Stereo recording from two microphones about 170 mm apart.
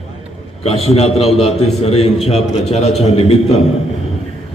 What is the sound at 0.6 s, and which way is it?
A man's voice, 35° left (ahead or behind).